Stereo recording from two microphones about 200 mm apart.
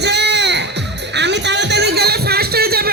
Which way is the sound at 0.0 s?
60° right (ahead or behind).